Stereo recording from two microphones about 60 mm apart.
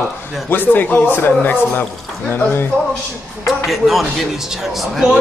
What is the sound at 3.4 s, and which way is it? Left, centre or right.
Speech, centre.